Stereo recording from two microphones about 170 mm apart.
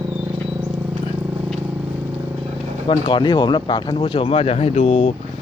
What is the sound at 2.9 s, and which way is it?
Speech, 30° left (ahead or behind).